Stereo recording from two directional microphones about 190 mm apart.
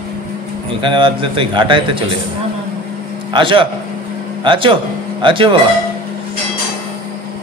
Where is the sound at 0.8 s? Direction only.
25° right (ahead or behind).